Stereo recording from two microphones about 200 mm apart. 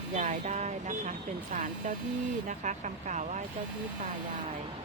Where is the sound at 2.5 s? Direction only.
40° right (ahead or behind).